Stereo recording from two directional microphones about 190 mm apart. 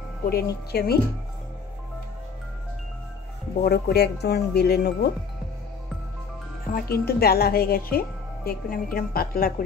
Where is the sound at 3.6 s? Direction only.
55° left (ahead or behind).